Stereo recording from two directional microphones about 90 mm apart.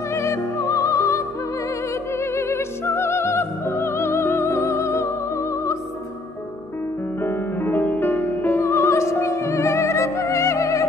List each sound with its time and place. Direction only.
0.1 s music: 30° left (ahead or behind)
7.2 s music: 25° left (ahead or behind)